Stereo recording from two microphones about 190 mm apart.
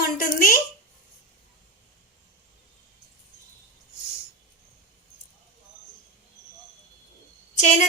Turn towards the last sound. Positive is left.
turn(degrees=40)  # may be behind; listen again after turning